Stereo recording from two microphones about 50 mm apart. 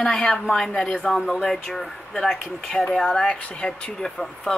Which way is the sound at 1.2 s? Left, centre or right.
Centre.